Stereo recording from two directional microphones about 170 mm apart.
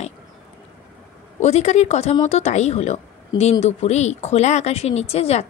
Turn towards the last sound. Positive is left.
turn(degrees=35)  # may be behind; listen again after turning